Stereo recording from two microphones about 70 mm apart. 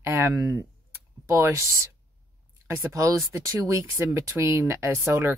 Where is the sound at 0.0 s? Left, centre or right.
Right.